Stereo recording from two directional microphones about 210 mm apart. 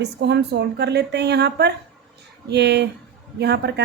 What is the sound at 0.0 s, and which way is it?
Speech, 55° right (ahead or behind).